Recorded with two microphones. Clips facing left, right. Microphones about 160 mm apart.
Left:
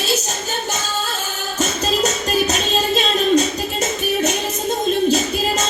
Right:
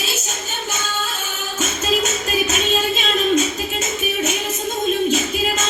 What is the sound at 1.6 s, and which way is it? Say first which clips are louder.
Music: left 2 dB; 35° left (ahead or behind).